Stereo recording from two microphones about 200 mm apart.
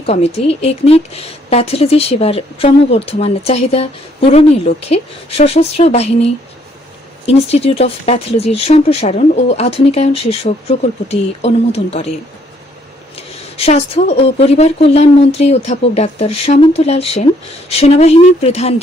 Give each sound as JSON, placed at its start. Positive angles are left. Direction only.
{"t": 0.0, "sound": "a woman's voice", "side_deg": 30}
{"t": 7.3, "sound": "a woman's voice", "side_deg": 30}
{"t": 13.1, "sound": "a woman's voice", "side_deg": 30}